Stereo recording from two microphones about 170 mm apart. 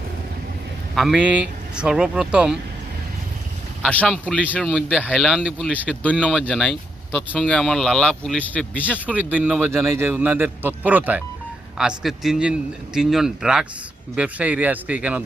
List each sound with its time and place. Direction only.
0.9 s a man's voice: 5° right (ahead or behind)
3.8 s speech: 5° left (ahead or behind)
5.4 s a man's voice: 5° right (ahead or behind)
9.0 s a man's voice: 10° right (ahead or behind)